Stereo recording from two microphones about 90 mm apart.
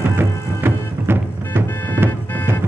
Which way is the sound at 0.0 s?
25° right (ahead or behind).